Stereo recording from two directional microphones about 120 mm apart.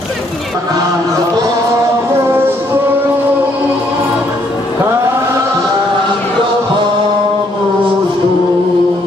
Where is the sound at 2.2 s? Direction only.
20° right (ahead or behind).